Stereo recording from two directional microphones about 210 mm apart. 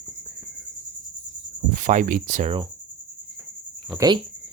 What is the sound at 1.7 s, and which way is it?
Speech, 40° right (ahead or behind).